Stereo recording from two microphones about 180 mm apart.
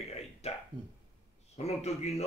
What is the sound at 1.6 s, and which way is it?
Speech, 35° left (ahead or behind).